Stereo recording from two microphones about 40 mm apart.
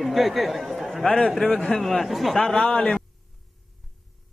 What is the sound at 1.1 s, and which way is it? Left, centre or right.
Speech, left.